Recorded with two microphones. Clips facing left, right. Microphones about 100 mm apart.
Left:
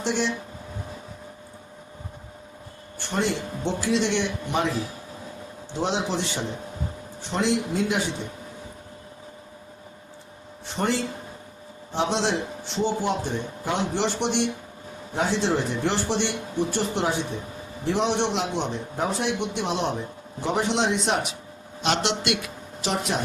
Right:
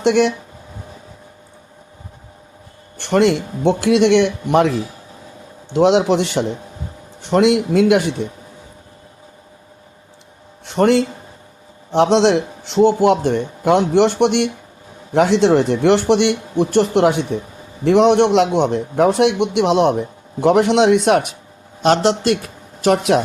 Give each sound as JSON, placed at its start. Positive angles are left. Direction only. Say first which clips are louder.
{"t": 0.0, "sound": "a man's voice", "louder": "right 11 dB", "side_deg": -70}
{"t": 3.0, "sound": "a man's voice", "louder": "right 11 dB", "side_deg": -75}
{"t": 5.7, "sound": "a man's voice", "louder": "right 13 dB", "side_deg": -75}
{"t": 10.7, "sound": "a man's voice", "louder": "right 12 dB", "side_deg": -65}
{"t": 15.1, "sound": "a man's voice", "louder": "right 11 dB", "side_deg": -80}
{"t": 21.8, "sound": "speech", "louder": "right 10 dB", "side_deg": -40}
{"t": 22.9, "sound": "a man's voice", "louder": "right 12 dB", "side_deg": -75}